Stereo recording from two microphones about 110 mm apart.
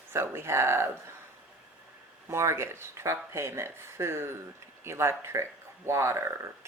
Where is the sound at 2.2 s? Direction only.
25° right (ahead or behind).